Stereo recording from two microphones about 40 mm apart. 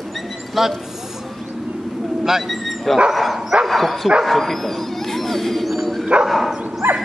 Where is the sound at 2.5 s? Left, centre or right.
Centre.